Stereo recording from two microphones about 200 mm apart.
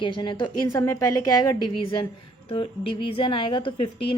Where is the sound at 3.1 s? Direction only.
25° left (ahead or behind).